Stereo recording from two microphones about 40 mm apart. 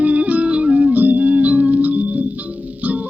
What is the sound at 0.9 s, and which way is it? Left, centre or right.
Music, right.